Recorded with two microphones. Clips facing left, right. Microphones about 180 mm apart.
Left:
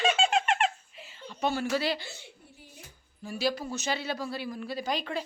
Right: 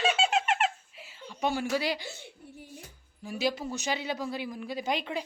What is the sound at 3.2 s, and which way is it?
A man's voice, 15° right (ahead or behind).